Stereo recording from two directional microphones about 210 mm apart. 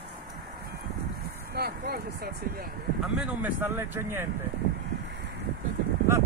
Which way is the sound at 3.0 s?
10° right (ahead or behind).